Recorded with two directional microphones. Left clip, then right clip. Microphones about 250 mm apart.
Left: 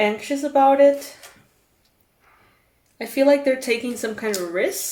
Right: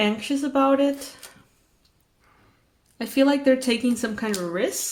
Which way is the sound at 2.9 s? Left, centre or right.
Right.